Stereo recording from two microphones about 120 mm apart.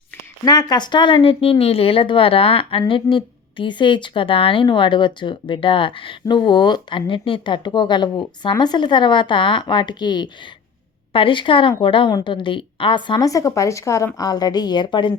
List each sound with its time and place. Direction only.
0.4 s a woman's voice: 35° left (ahead or behind)
13.2 s a woman's voice: 25° left (ahead or behind)